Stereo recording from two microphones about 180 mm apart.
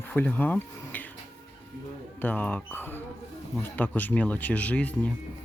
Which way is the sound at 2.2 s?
10° left (ahead or behind).